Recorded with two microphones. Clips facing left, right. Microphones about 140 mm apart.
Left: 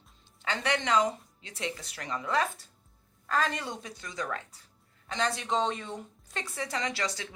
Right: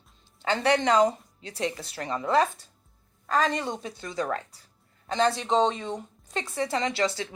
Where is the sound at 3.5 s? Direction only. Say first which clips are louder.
Right 6 dB; 25° right (ahead or behind).